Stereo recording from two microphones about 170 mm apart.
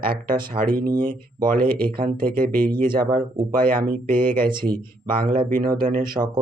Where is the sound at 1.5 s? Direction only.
60° right (ahead or behind).